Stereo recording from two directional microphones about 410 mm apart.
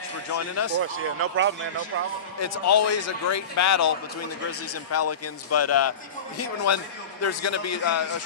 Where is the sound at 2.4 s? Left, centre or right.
Left.